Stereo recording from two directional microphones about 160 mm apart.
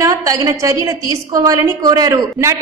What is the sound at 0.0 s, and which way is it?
A woman's voice, 20° right (ahead or behind).